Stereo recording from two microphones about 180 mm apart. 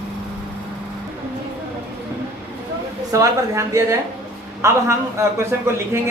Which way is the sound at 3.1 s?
15° right (ahead or behind).